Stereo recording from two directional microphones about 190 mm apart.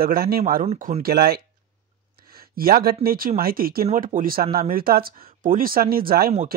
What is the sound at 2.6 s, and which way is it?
Speech, 50° right (ahead or behind).